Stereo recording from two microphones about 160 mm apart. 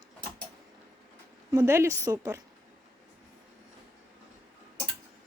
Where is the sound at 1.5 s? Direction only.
20° right (ahead or behind).